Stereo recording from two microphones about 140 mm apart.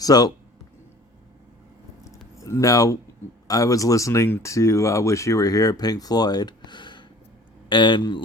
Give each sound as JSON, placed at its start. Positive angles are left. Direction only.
{"t": 0.0, "sound": "speech", "side_deg": 25}
{"t": 2.4, "sound": "a man's voice", "side_deg": 25}